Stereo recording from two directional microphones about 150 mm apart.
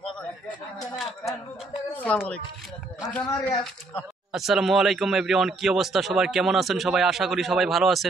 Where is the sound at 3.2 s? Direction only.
25° left (ahead or behind).